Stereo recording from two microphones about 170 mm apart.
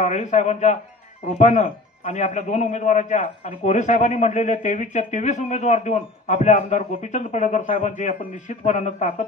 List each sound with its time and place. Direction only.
0.0 s a man's voice: 45° left (ahead or behind)